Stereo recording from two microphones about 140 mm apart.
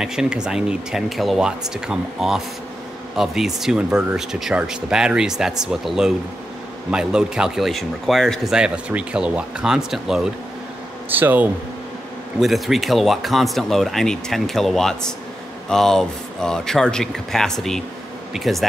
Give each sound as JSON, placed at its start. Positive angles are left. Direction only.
{"t": 0.0, "sound": "speech", "side_deg": -5}
{"t": 12.4, "sound": "speech", "side_deg": 0}